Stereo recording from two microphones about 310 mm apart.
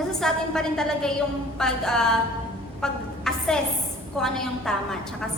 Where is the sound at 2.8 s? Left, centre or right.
Centre.